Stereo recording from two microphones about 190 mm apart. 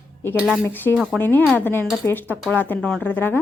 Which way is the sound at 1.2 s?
10° left (ahead or behind).